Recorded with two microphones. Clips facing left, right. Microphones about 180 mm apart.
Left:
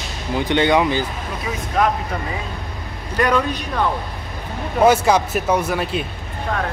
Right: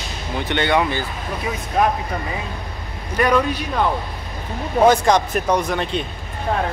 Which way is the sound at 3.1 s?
15° right (ahead or behind).